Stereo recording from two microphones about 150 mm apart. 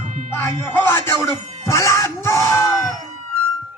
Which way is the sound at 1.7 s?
20° left (ahead or behind).